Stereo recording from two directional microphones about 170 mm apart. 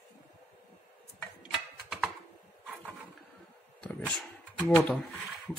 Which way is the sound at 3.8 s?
5° left (ahead or behind).